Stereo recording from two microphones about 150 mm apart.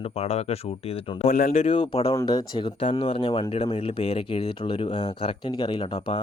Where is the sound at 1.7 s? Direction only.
35° left (ahead or behind).